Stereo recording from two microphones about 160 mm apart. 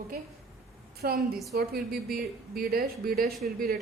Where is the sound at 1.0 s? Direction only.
70° right (ahead or behind).